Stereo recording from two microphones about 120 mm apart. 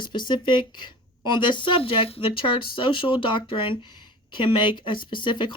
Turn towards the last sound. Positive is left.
turn(degrees=40)  # may be behind; listen again after turning